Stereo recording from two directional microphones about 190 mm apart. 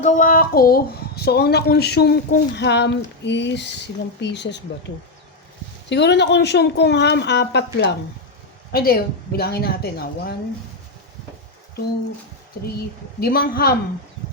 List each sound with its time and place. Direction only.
0.0 s a woman's voice: 45° left (ahead or behind); by 4.6 s 65° left (ahead or behind)
5.9 s a woman's voice: 65° left (ahead or behind)
8.7 s speech: 55° left (ahead or behind)
12.6 s a woman's voice: 55° left (ahead or behind)